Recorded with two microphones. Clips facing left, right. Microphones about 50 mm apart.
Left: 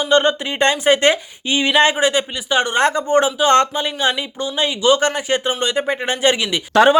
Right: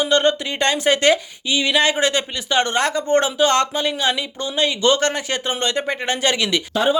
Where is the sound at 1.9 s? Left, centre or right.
Centre.